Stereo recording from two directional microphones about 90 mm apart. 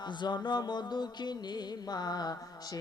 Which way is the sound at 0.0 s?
55° left (ahead or behind).